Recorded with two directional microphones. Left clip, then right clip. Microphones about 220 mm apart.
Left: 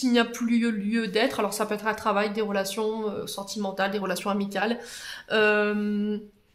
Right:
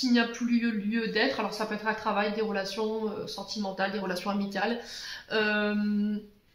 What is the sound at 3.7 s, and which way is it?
Speech, 50° left (ahead or behind).